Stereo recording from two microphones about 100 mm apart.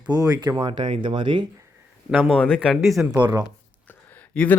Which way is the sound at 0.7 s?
55° right (ahead or behind).